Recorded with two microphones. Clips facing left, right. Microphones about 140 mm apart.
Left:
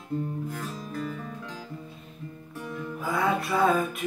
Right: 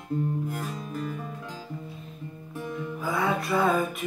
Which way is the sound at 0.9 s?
15° right (ahead or behind).